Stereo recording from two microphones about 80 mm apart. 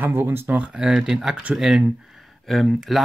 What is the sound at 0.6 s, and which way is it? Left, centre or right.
Speech, centre.